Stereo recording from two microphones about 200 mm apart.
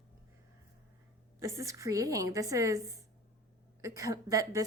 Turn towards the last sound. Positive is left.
turn(degrees=-15)  # may be behind; listen again after turning